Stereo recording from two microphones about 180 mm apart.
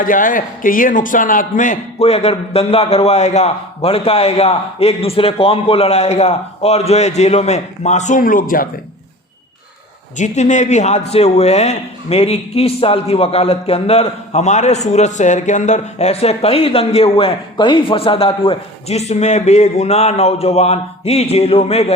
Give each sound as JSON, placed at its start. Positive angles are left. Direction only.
{"t": 0.0, "sound": "a man's voice", "side_deg": 50}
{"t": 10.2, "sound": "a man's voice", "side_deg": 40}